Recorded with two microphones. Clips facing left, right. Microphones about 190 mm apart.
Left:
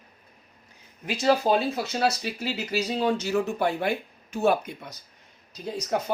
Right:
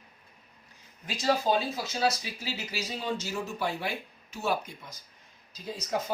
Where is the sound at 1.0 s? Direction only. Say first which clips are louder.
Left 5 dB; 60° left (ahead or behind).